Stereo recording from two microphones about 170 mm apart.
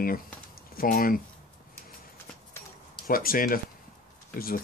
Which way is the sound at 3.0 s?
55° left (ahead or behind).